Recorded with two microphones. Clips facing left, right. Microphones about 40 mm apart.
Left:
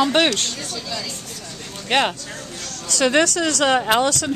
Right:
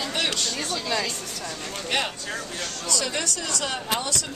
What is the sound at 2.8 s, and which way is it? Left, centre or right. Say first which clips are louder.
Speech: left 11 dB; left.